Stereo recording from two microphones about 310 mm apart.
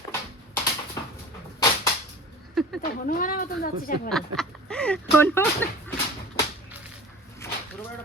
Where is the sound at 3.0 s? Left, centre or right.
Left.